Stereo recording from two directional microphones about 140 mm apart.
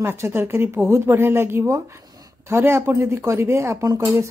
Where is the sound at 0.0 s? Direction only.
15° right (ahead or behind).